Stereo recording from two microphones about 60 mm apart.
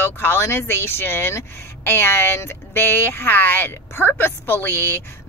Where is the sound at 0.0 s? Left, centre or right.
Left.